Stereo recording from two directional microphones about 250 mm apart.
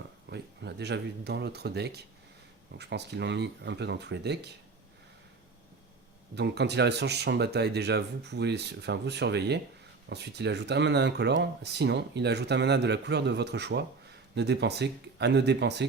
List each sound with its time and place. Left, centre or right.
0.3 s speech: right
6.3 s speech: right